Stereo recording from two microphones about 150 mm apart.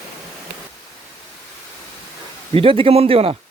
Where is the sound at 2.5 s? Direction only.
35° right (ahead or behind).